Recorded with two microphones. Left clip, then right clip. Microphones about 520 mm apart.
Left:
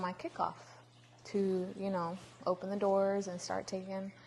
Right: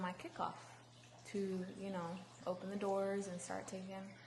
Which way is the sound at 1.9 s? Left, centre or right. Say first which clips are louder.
Left 6 dB; left.